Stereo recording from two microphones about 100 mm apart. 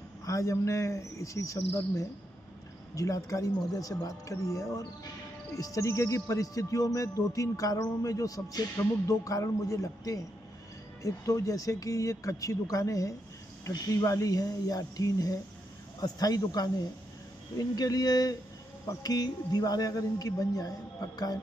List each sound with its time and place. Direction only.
0.2 s speech: 30° left (ahead or behind)
2.9 s speech: 35° left (ahead or behind)